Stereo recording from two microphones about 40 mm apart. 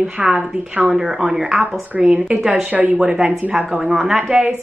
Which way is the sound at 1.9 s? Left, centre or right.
Right.